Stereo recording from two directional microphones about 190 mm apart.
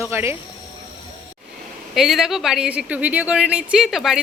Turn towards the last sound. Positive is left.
turn(degrees=0)  # may be behind; listen again after turning